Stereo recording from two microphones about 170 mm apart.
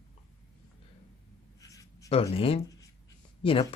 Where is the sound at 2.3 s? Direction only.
35° left (ahead or behind).